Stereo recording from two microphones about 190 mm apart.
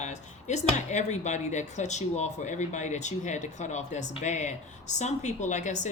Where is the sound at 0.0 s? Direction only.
40° left (ahead or behind).